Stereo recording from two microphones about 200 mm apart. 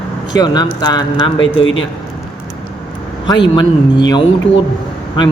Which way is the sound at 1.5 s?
75° left (ahead or behind).